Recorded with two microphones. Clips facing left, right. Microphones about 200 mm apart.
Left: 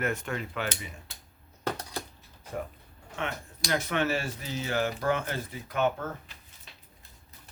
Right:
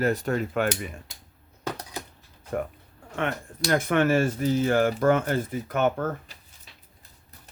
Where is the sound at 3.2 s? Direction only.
55° right (ahead or behind).